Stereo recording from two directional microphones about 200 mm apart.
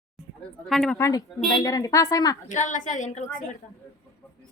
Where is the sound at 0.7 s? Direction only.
5° left (ahead or behind).